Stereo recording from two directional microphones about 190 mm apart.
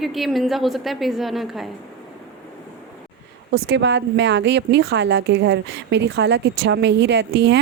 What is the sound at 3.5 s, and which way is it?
A woman's voice, 65° right (ahead or behind).